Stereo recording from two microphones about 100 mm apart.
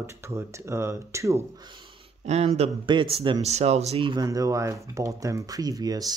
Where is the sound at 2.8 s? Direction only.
55° right (ahead or behind).